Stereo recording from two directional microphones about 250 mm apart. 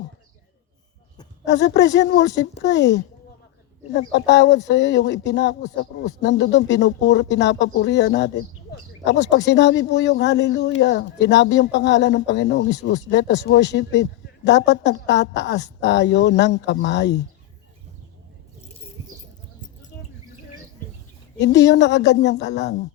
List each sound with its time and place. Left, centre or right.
1.5 s speech: left
21.4 s speech: left